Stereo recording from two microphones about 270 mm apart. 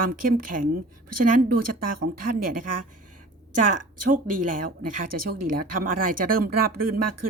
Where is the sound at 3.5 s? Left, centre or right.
Right.